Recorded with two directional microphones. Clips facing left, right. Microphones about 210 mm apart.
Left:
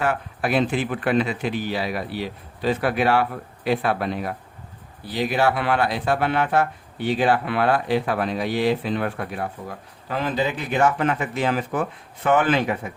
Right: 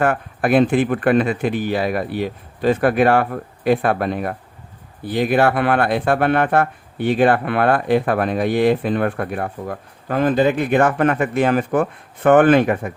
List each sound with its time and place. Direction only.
0.0 s speech: 50° right (ahead or behind)